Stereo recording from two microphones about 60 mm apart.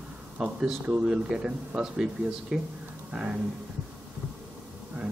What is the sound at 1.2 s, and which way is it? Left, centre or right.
Speech, centre.